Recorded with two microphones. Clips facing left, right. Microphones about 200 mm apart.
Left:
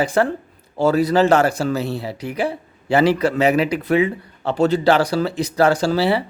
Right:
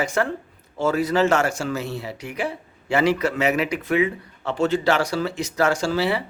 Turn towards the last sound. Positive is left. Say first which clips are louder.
# left 4 dB
turn(degrees=35)  # may be behind; listen again after turning